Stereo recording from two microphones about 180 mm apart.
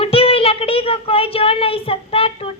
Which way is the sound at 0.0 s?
30° left (ahead or behind).